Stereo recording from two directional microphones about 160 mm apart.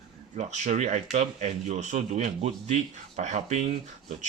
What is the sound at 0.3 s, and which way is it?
Speech, 45° right (ahead or behind).